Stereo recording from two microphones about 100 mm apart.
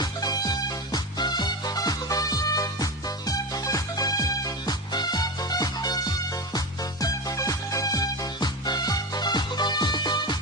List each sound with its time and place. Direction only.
0.0 s music: 40° left (ahead or behind)